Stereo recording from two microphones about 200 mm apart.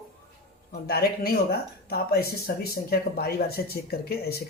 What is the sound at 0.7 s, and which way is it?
Speech, 50° left (ahead or behind).